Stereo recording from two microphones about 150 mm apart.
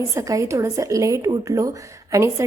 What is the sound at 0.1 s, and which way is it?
A woman's voice, 20° right (ahead or behind).